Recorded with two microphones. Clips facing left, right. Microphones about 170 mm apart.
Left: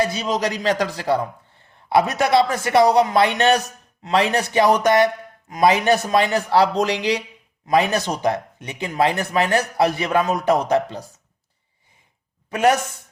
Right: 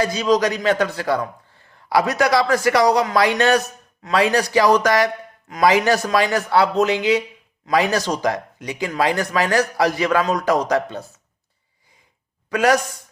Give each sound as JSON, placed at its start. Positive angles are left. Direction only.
{"t": 0.0, "sound": "a man's voice", "side_deg": 25}
{"t": 12.5, "sound": "a man's voice", "side_deg": 25}